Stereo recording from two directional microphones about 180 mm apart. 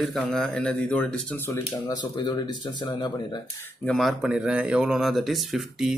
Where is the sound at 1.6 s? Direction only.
25° left (ahead or behind).